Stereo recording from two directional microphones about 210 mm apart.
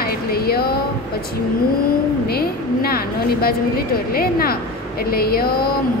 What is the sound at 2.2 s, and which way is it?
A woman's voice, 45° left (ahead or behind).